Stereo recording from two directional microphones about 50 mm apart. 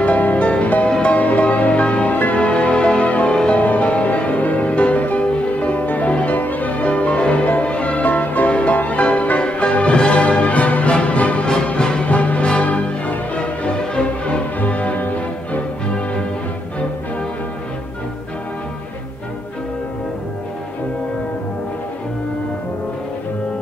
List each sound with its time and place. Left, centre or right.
0.0 s music: left